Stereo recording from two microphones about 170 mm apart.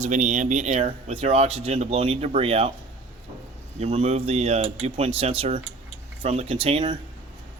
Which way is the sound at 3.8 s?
40° right (ahead or behind).